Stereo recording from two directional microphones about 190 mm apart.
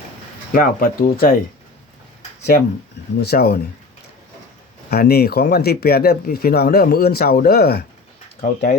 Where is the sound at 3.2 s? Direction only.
55° left (ahead or behind).